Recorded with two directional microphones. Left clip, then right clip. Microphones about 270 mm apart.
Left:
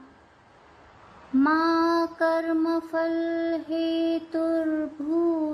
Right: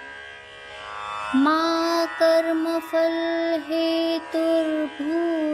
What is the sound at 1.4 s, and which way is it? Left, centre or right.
Mantra, right.